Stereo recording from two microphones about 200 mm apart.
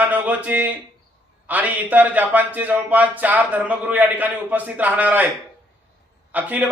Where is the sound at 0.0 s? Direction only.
10° right (ahead or behind).